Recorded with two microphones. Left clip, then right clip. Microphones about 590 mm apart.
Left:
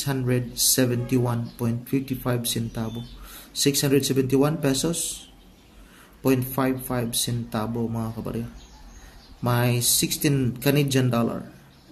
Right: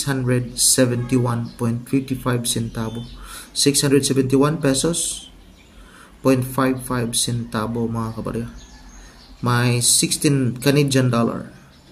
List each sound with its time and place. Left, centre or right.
0.0 s speech: left
6.2 s speech: left